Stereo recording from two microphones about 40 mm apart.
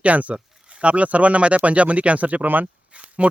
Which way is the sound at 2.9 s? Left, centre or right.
Right.